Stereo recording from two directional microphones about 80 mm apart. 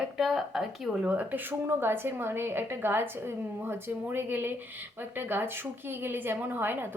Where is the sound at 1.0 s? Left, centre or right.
Centre.